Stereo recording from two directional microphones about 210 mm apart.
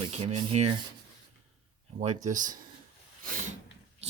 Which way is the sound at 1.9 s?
35° right (ahead or behind).